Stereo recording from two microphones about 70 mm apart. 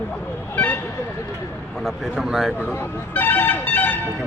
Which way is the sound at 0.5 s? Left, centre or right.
Left.